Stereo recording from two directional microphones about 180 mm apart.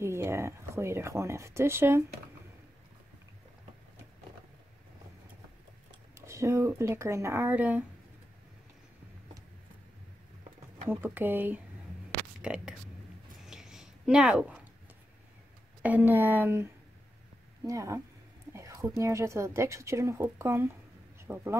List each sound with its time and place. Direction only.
0.0 s speech: 15° right (ahead or behind)
6.1 s speech: 15° right (ahead or behind)
10.9 s speech: 10° right (ahead or behind)
13.5 s a sound: 5° right (ahead or behind)
15.8 s speech: 10° right (ahead or behind)
18.5 s a sound: 20° right (ahead or behind)
18.9 s speech: 15° right (ahead or behind)